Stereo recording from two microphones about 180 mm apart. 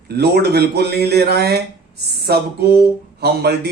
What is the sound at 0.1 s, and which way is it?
Speech, 65° right (ahead or behind).